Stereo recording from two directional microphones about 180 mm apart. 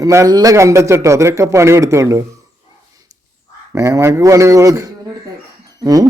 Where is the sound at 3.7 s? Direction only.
15° right (ahead or behind).